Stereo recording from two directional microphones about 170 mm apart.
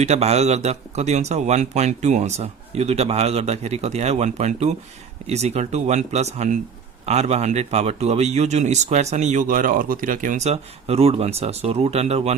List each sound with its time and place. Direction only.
0.0 s speech: 40° right (ahead or behind)